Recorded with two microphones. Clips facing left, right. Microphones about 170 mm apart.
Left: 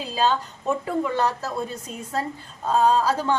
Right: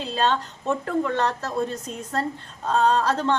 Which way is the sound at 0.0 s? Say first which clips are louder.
Even; 5° left (ahead or behind).